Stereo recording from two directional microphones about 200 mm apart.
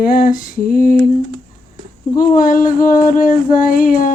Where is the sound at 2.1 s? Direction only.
45° left (ahead or behind).